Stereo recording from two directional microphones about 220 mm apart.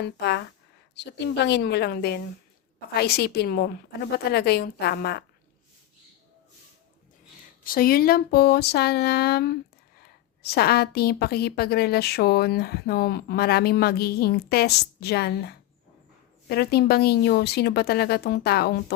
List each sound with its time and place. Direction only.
0.0 s a woman's voice: 50° left (ahead or behind)
7.6 s a woman's voice: 40° left (ahead or behind)